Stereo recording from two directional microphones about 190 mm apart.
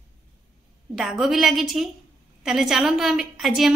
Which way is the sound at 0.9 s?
5° right (ahead or behind).